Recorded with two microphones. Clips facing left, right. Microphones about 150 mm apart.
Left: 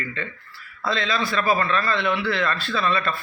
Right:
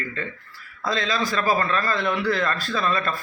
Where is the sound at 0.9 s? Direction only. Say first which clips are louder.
Even; 40° right (ahead or behind).